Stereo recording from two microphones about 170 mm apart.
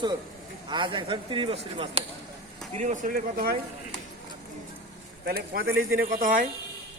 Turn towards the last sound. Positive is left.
turn(degrees=-50)  # may be behind; listen again after turning